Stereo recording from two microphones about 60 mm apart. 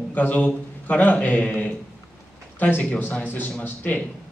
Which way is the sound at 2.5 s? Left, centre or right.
Left.